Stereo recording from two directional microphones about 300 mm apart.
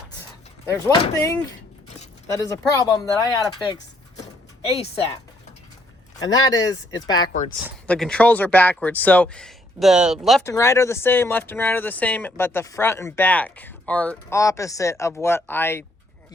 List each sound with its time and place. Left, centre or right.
0.6 s speech: centre
2.3 s speech: centre
6.2 s speech: centre
7.9 s speech: centre